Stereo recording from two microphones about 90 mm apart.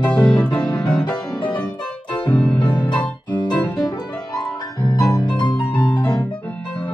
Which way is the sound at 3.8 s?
45° left (ahead or behind).